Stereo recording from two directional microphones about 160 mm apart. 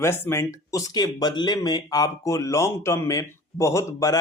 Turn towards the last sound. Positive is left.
turn(degrees=20)  # may be behind; listen again after turning